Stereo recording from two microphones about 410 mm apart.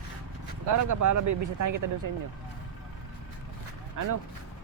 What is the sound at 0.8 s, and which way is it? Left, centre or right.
Speech, right.